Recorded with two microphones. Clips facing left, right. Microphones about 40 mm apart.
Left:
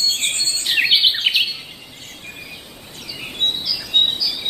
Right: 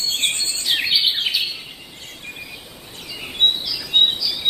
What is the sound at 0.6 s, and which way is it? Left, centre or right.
Bird vocalization, left.